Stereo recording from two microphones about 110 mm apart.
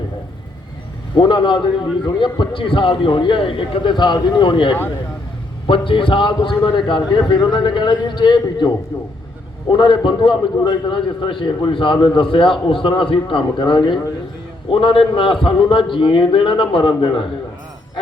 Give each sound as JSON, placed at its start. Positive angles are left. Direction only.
{"t": 1.2, "sound": "a man's voice", "side_deg": 45}
{"t": 9.7, "sound": "a man's voice", "side_deg": 45}